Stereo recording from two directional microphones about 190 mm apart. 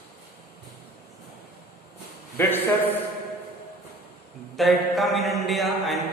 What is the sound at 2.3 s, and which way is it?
Speech, 10° left (ahead or behind).